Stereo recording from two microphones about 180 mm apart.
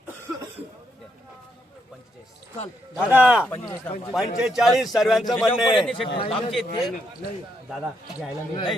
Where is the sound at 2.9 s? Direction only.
10° right (ahead or behind).